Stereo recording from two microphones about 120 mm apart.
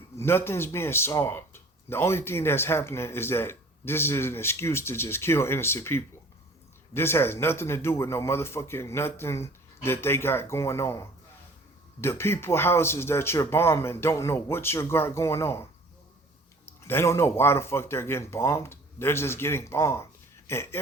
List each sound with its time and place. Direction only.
0.2 s speech: 20° left (ahead or behind)
16.8 s speech: 20° left (ahead or behind)